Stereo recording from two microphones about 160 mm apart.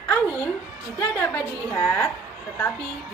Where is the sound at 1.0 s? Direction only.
15° left (ahead or behind).